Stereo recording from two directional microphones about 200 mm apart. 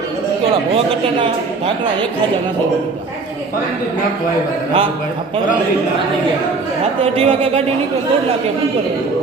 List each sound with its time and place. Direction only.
7.0 s speech: 30° right (ahead or behind)